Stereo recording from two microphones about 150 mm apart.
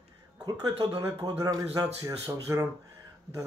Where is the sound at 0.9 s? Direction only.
25° right (ahead or behind).